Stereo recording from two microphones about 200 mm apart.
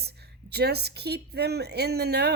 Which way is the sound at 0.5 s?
55° right (ahead or behind).